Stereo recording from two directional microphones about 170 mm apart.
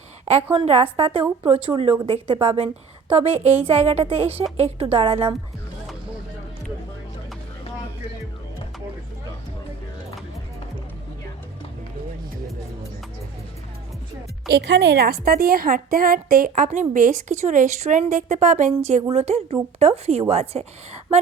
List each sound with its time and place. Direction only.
0.5 s a woman's voice: 35° right (ahead or behind)
14.5 s a woman's voice: 90° right; by 20.7 s 35° right (ahead or behind)